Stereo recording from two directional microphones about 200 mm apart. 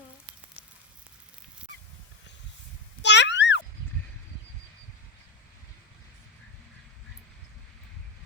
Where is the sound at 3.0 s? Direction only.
60° left (ahead or behind).